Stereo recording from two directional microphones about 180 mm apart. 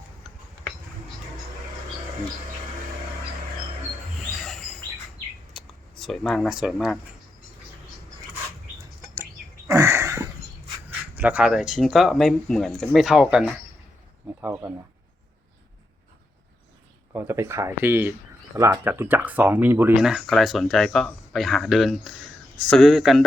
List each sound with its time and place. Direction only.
4.2 s chirp: centre (ahead or behind)
5.5 s speech: centre (ahead or behind)
9.7 s a sound: 15° right (ahead or behind)
11.2 s speech: 10° right (ahead or behind)
14.4 s speech: 10° right (ahead or behind)
17.2 s speech: 15° right (ahead or behind)